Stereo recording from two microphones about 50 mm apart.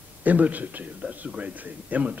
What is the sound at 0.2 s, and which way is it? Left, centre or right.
A man's voice, right.